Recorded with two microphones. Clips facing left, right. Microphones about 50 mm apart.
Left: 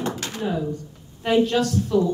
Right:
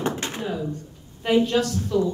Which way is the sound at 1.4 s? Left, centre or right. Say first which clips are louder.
Left 1 dB; centre.